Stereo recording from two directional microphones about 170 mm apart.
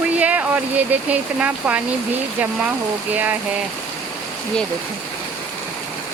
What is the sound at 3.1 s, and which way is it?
Speech, 10° right (ahead or behind).